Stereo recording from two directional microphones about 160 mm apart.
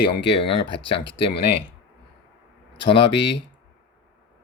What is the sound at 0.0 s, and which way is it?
Speech, 30° left (ahead or behind).